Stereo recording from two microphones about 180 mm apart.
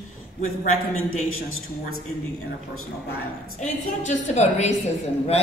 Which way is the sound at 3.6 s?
40° left (ahead or behind).